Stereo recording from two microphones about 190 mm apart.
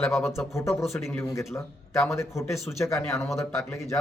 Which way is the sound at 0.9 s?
Centre (ahead or behind).